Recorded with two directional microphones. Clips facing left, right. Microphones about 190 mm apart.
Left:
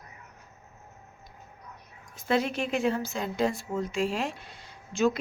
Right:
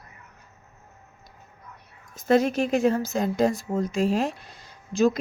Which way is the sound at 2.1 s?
45° right (ahead or behind).